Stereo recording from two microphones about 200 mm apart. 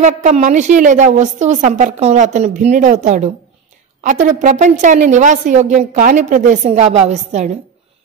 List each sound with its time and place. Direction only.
0.0 s a woman's voice: 40° right (ahead or behind)